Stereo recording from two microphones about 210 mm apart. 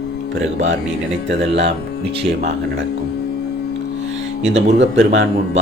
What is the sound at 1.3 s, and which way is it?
Speech, 55° right (ahead or behind).